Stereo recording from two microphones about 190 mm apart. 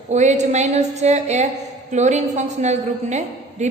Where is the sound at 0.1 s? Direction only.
40° right (ahead or behind).